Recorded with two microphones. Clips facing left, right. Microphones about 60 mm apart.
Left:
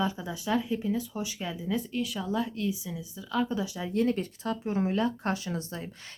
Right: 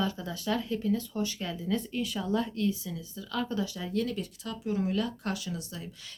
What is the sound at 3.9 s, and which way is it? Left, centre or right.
Speech, left.